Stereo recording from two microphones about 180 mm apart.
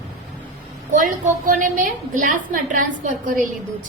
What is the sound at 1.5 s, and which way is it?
A woman's voice, 45° right (ahead or behind).